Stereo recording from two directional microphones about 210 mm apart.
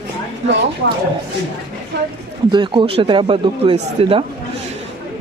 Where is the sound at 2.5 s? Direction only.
25° right (ahead or behind).